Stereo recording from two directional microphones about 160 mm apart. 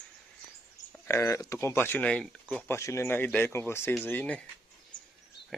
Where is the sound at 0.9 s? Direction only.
15° left (ahead or behind).